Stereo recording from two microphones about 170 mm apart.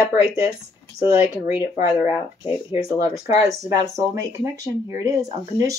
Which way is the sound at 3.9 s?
20° right (ahead or behind).